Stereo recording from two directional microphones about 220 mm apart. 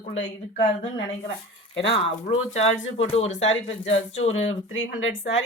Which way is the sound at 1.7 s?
55° left (ahead or behind).